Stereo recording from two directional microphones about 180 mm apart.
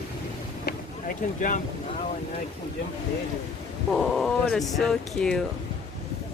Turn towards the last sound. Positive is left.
turn(degrees=5)  # may be behind; listen again after turning